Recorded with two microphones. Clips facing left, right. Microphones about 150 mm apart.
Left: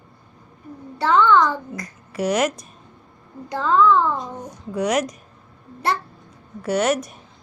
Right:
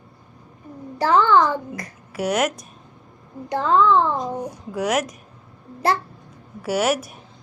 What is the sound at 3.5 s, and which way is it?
Speech, 30° right (ahead or behind).